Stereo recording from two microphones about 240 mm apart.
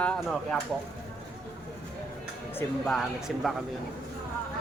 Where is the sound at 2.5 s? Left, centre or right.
Centre.